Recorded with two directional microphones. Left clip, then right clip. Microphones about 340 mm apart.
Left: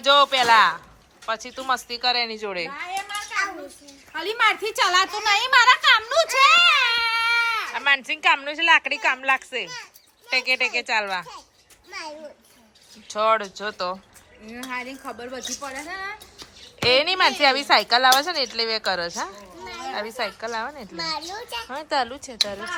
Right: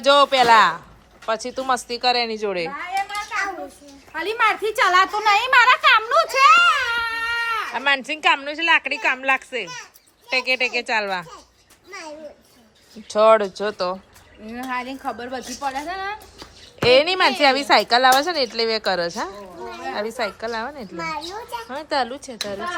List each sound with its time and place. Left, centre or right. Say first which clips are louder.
0.0 s speech: right 2 dB; centre
4.1 s speech: right 1 dB; centre
13.1 s speech: right 6 dB; centre
14.4 s speech: right 4 dB; right
16.4 s speech: right 2 dB; centre